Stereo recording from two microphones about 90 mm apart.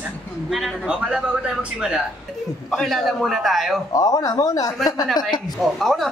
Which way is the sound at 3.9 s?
40° left (ahead or behind).